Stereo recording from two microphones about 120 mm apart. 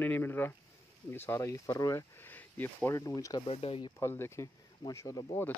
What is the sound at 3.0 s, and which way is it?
Speech, 30° left (ahead or behind).